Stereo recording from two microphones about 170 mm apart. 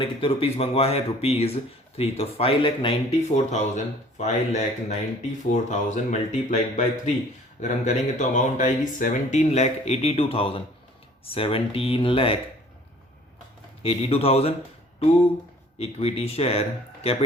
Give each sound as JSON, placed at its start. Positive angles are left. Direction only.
{"t": 0.0, "sound": "speech", "side_deg": 30}
{"t": 13.8, "sound": "speech", "side_deg": 35}
{"t": 15.8, "sound": "speech", "side_deg": 35}